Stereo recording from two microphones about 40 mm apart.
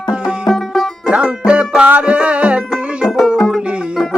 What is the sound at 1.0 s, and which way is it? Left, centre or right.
Music, right.